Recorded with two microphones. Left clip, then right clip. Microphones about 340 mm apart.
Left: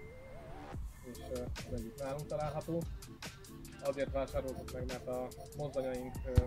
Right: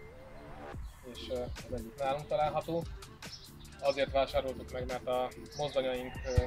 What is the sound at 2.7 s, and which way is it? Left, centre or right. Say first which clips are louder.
Speech: right 4 dB; right.